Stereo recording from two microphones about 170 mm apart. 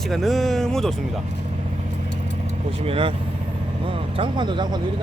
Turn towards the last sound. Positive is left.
turn(degrees=-25)  # may be behind; listen again after turning